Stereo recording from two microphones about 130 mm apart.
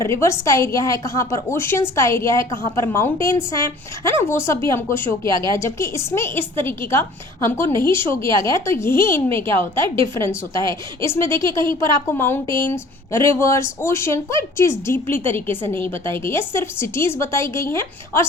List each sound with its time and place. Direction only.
0.0 s a woman's voice: 20° left (ahead or behind)